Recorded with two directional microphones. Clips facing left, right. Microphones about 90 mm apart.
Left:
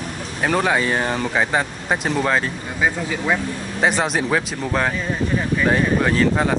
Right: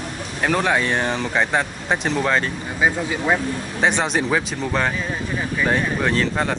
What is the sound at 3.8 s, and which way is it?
Speech, centre (ahead or behind).